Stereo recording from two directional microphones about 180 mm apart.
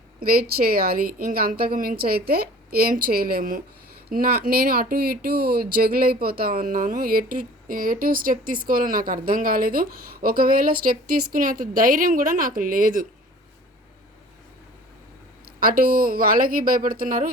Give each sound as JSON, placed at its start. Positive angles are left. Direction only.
{"t": 0.2, "sound": "a woman's voice", "side_deg": -55}
{"t": 15.6, "sound": "speech", "side_deg": -55}